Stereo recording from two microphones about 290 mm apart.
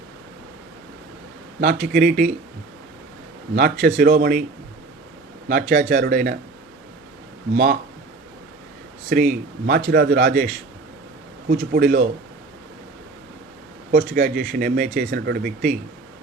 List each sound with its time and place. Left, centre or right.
1.6 s speech: right
3.5 s speech: right
5.5 s speech: right
7.5 s speech: right
9.0 s speech: right
13.9 s speech: right